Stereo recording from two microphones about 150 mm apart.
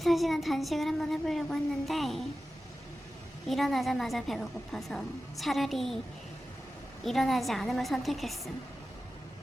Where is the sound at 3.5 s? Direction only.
Centre (ahead or behind).